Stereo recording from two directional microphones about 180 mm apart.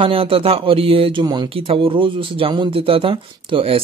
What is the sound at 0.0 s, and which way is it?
Speech, 30° right (ahead or behind).